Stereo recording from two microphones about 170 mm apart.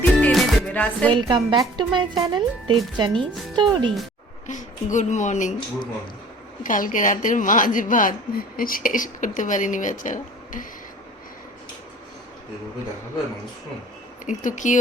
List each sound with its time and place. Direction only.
0.0 s music: 5° left (ahead or behind)
1.1 s speech: 25° right (ahead or behind)
4.4 s a woman's voice: 45° left (ahead or behind)
6.6 s a woman's voice: 50° left (ahead or behind)
14.3 s a woman's voice: 45° left (ahead or behind)